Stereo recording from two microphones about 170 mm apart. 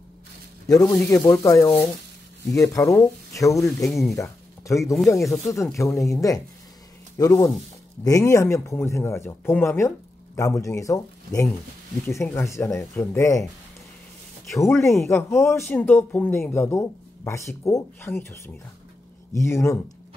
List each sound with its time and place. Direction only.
0.7 s speech: 20° left (ahead or behind)
3.9 s speech: centre (ahead or behind)
4.2 s speech: 20° left (ahead or behind)
14.6 s speech: 15° left (ahead or behind)